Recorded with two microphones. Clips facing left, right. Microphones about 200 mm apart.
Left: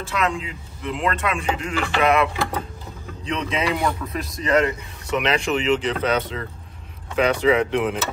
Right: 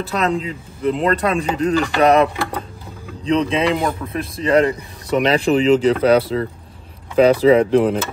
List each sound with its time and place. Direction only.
0.0 s speech: 35° right (ahead or behind)
3.3 s speech: 30° right (ahead or behind)